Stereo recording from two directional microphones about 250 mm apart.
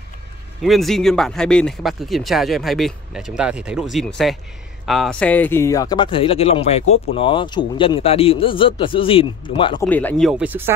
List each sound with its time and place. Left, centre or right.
0.7 s speech: centre
9.8 s speech: centre